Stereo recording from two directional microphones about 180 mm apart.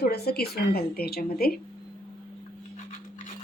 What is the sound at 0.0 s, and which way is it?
A woman's voice, 60° left (ahead or behind).